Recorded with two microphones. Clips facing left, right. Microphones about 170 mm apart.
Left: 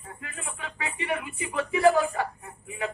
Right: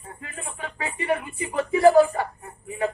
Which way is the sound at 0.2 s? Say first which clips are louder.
Right 4 dB; 35° right (ahead or behind).